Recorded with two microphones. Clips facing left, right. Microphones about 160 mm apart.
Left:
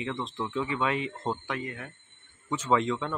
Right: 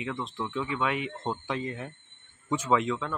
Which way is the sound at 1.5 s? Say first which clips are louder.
Right 2 dB; 25° right (ahead or behind).